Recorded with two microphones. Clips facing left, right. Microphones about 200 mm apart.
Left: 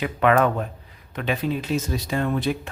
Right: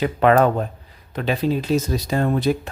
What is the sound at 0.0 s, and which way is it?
Speech, 35° right (ahead or behind).